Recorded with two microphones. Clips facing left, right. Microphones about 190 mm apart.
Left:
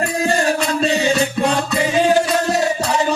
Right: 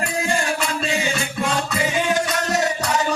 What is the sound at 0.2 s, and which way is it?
Music, 40° left (ahead or behind).